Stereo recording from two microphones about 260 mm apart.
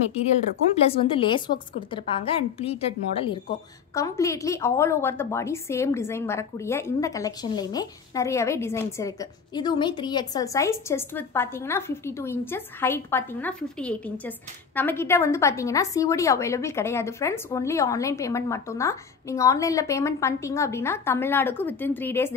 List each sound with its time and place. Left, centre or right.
0.7 s a woman's voice: left
4.2 s a woman's voice: centre